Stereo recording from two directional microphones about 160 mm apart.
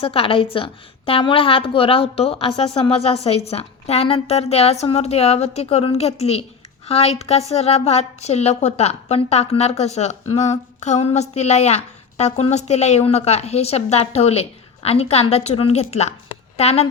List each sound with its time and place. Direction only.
0.0 s a woman's voice: 35° left (ahead or behind)